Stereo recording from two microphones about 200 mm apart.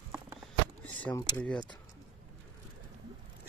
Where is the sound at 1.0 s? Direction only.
10° left (ahead or behind).